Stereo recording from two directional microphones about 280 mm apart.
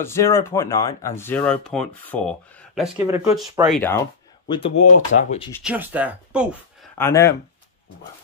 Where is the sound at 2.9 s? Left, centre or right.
Centre.